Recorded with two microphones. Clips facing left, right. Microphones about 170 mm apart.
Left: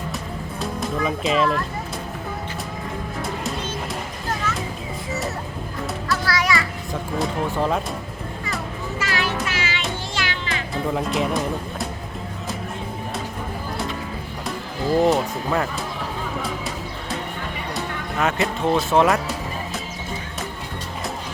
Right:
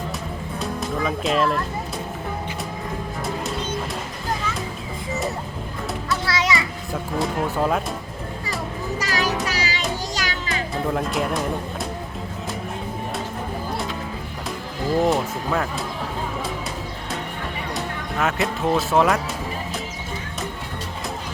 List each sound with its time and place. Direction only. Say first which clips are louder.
0.6 s speech: left 1 dB; centre (ahead or behind)
6.1 s music: left 1 dB; 20° right (ahead or behind)
7.2 s speech: right 1 dB; centre (ahead or behind)
9.0 s music: right 1 dB; 40° right (ahead or behind)
10.9 s speech: left 2 dB; centre (ahead or behind)
15.0 s speech: left 2 dB; centre (ahead or behind)
17.7 s speech: left 1 dB; centre (ahead or behind)